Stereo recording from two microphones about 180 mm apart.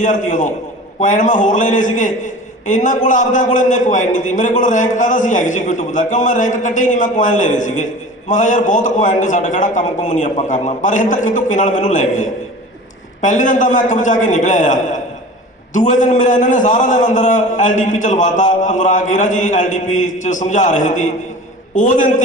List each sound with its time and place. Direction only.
0.0 s a man's voice: 45° left (ahead or behind)